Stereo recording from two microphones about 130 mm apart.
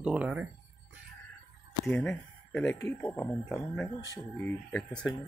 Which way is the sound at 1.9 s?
10° left (ahead or behind).